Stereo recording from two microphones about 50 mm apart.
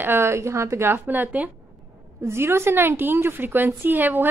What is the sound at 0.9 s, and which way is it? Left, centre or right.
Speech, right.